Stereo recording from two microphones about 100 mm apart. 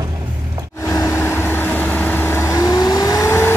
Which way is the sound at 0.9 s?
30° left (ahead or behind).